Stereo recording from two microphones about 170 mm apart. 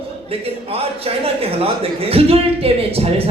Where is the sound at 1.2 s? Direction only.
35° right (ahead or behind).